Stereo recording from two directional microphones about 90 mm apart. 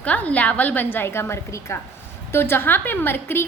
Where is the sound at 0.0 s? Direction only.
15° left (ahead or behind).